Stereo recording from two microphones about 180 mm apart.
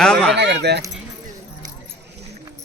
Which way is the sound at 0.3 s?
70° right (ahead or behind).